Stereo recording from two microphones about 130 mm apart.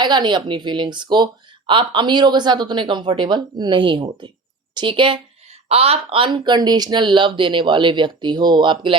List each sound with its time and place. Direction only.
0.0 s speech: 35° right (ahead or behind)